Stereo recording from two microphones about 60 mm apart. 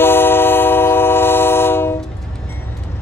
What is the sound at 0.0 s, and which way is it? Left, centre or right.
Train, left.